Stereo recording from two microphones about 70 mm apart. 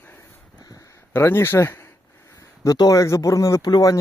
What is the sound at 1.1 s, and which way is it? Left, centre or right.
Speech, left.